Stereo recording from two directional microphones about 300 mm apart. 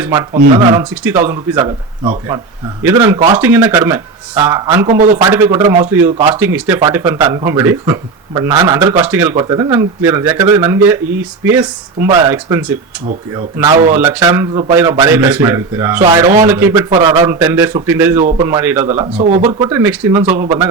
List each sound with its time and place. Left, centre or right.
0.0 s speech: centre
2.8 s speech: centre
4.9 s a man's voice: right
5.2 s speech: centre
18.9 s speech: centre
20.2 s a man's voice: right